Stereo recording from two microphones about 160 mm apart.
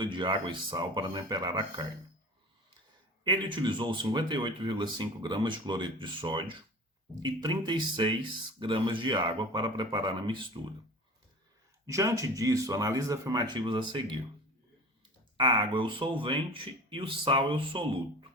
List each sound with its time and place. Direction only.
0.0 s speech: 30° right (ahead or behind)
3.2 s speech: 30° right (ahead or behind)
11.9 s speech: 20° right (ahead or behind)
15.4 s speech: 30° right (ahead or behind)